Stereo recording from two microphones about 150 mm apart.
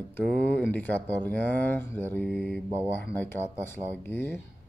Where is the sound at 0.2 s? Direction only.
5° left (ahead or behind).